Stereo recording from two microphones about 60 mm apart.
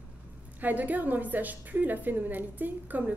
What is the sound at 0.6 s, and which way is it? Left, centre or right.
A woman's voice, right.